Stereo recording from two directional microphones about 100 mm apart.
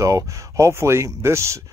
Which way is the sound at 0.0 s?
35° right (ahead or behind).